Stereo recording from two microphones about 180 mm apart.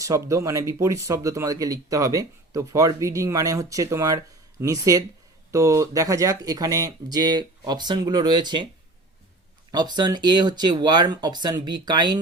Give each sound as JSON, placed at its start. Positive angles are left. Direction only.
{"t": 0.0, "sound": "speech", "side_deg": -20}
{"t": 9.7, "sound": "speech", "side_deg": -25}